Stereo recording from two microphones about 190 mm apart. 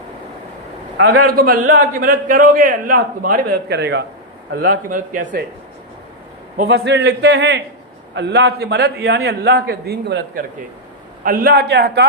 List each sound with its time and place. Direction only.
0.9 s a man's voice: 70° right (ahead or behind)
1.3 s a man's voice: 50° right (ahead or behind)
4.5 s a man's voice: 50° right (ahead or behind)
6.7 s a man's voice: 65° right (ahead or behind)